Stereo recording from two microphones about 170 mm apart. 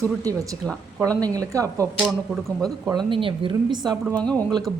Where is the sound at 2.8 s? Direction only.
25° right (ahead or behind).